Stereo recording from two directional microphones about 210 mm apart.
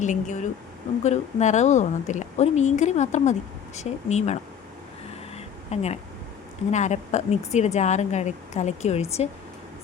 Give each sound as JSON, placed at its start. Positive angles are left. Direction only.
{"t": 0.0, "sound": "speech", "side_deg": 35}
{"t": 5.7, "sound": "speech", "side_deg": 30}